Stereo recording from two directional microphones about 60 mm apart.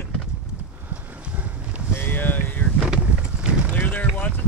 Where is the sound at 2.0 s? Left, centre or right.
Left.